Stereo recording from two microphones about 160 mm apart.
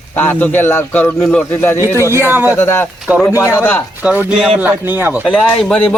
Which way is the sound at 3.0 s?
5° right (ahead or behind).